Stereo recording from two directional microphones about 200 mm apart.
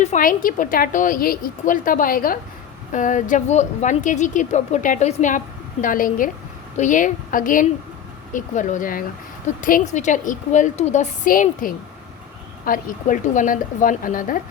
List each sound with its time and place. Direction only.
0.0 s a woman's voice: 40° left (ahead or behind)